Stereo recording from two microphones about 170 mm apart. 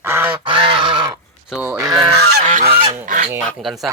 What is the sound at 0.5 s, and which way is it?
Goose, 30° right (ahead or behind).